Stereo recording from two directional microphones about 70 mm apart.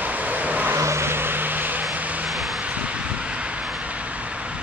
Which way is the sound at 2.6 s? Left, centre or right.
Centre.